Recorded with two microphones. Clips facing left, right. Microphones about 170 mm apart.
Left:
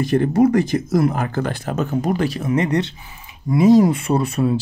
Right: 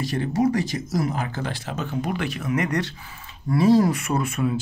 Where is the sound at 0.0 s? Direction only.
55° left (ahead or behind); by 3.9 s 15° left (ahead or behind).